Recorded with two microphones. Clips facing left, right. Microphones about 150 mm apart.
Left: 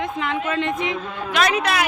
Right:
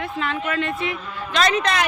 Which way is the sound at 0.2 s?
20° left (ahead or behind).